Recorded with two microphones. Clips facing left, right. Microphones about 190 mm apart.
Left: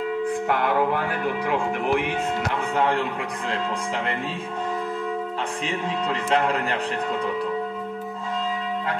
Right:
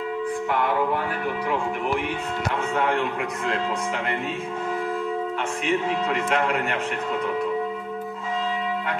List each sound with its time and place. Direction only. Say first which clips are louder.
2.7 s a man's voice: left 1 dB; 35° left (ahead or behind)
6.3 s a man's voice: left 4 dB; 30° left (ahead or behind)